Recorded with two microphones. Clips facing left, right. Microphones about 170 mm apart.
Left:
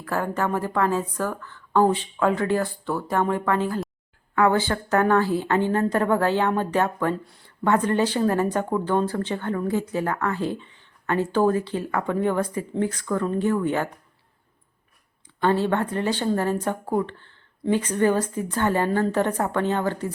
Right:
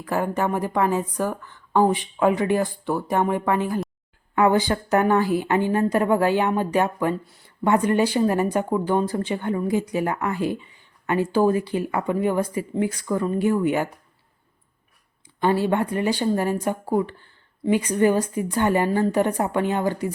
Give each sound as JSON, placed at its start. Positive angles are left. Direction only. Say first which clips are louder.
{"t": 0.0, "sound": "speech", "louder": "right 2 dB", "side_deg": -15}
{"t": 15.4, "sound": "speech", "louder": "right 1 dB", "side_deg": -10}